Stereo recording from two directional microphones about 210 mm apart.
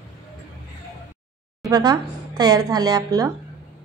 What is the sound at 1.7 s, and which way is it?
A woman's voice, 20° right (ahead or behind).